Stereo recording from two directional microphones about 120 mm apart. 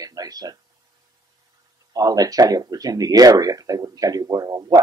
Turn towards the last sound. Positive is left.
turn(degrees=-30)  # may be behind; listen again after turning